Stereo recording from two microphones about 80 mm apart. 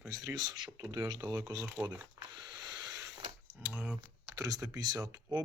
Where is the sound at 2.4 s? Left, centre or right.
Right.